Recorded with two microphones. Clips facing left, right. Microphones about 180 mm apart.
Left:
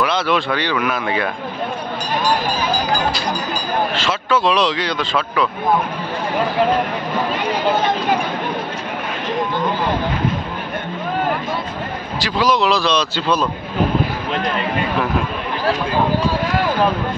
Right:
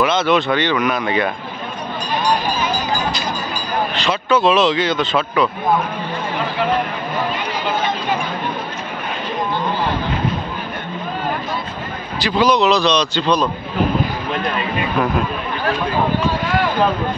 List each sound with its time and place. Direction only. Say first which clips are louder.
0.0 s speech: right 3 dB; centre (ahead or behind)
3.9 s speech: right 1 dB; centre (ahead or behind)
12.2 s speech: right 2 dB; centre (ahead or behind)